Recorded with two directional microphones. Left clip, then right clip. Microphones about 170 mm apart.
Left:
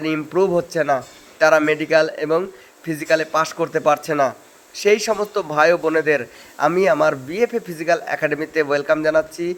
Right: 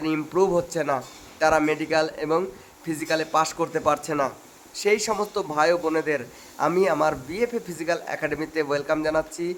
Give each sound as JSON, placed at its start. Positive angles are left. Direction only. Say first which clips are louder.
{"t": 0.0, "sound": "a man's voice", "louder": "left 4 dB", "side_deg": 15}